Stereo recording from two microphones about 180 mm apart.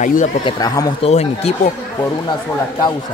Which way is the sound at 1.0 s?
35° left (ahead or behind).